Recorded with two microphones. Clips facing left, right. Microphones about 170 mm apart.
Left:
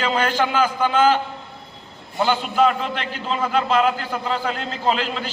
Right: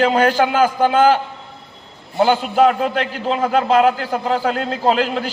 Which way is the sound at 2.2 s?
50° right (ahead or behind).